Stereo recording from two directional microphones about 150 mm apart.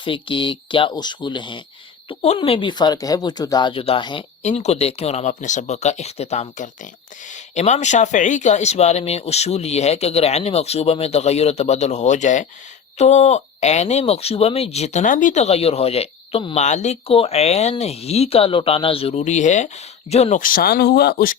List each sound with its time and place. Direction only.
0.0 s speech: 35° left (ahead or behind)
4.4 s speech: 50° left (ahead or behind)
16.6 s speech: 50° left (ahead or behind)
20.4 s speech: 75° left (ahead or behind)